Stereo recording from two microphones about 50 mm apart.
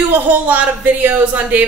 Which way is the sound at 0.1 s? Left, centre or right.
Right.